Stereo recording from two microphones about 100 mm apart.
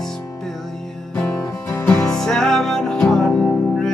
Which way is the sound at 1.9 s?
5° left (ahead or behind).